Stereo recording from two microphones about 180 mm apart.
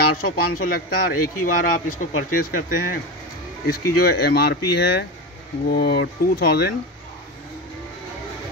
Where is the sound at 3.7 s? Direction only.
60° left (ahead or behind).